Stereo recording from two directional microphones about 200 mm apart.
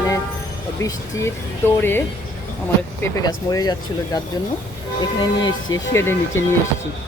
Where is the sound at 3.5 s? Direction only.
20° left (ahead or behind).